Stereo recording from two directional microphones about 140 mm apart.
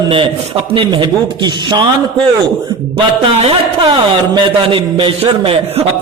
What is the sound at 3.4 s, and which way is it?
A man's voice, 35° right (ahead or behind).